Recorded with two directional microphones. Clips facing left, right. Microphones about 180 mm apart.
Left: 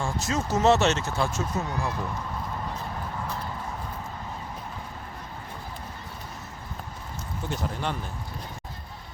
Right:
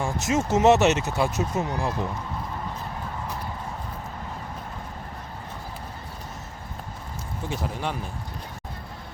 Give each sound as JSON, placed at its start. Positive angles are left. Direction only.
{"t": 0.0, "sound": "speech", "side_deg": -20}
{"t": 7.4, "sound": "speech", "side_deg": -5}